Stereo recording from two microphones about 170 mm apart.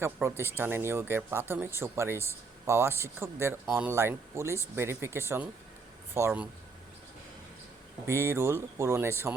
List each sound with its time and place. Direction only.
0.0 s speech: 15° right (ahead or behind)
8.0 s speech: 15° right (ahead or behind)